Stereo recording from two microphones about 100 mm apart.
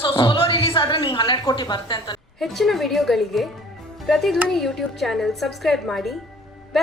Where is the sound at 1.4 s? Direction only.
45° left (ahead or behind).